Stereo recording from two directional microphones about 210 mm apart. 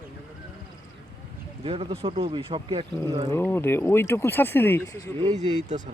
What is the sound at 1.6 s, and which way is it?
Speech, 25° right (ahead or behind).